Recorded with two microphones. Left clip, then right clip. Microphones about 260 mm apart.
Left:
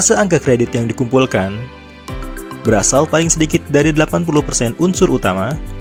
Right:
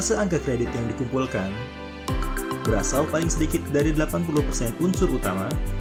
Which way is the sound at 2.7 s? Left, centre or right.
Left.